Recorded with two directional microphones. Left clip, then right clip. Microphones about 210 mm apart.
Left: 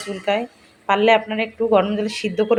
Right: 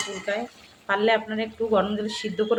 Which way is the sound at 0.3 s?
20° left (ahead or behind).